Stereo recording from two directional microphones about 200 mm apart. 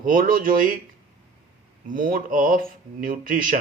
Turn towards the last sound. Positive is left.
turn(degrees=-45)  # may be behind; listen again after turning